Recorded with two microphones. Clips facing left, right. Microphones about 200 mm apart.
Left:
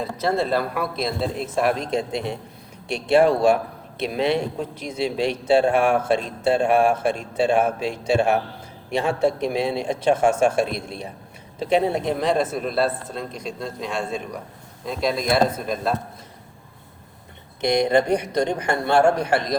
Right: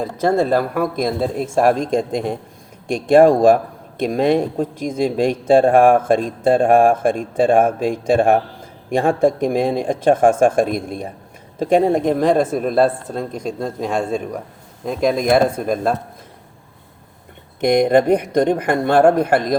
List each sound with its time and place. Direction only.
0.0 s a man's voice: 50° right (ahead or behind)
17.6 s a man's voice: 50° right (ahead or behind)